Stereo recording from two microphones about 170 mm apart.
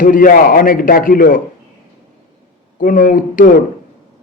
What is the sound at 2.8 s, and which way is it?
Speech, 55° left (ahead or behind).